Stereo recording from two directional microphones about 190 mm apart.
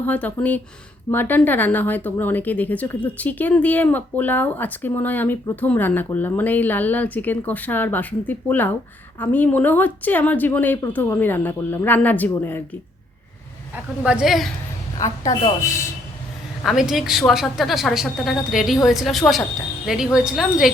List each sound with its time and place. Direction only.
0.0 s speech: 10° left (ahead or behind)
14.0 s a woman's voice: 5° right (ahead or behind)
14.9 s a woman's voice: 20° left (ahead or behind)
16.6 s a woman's voice: centre (ahead or behind)